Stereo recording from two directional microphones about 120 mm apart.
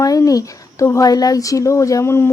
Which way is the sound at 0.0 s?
30° left (ahead or behind).